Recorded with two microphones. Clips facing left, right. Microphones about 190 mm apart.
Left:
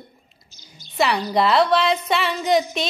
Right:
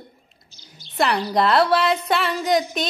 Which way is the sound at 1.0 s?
Centre (ahead or behind).